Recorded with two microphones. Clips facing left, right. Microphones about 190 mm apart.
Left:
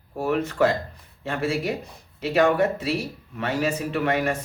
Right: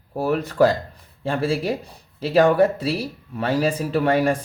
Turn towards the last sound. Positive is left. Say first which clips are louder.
# right 5 dB
turn(degrees=-35)  # may be behind; listen again after turning